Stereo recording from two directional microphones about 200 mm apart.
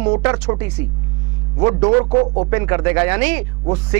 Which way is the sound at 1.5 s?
25° right (ahead or behind).